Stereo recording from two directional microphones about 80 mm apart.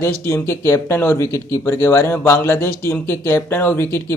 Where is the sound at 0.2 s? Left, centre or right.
Left.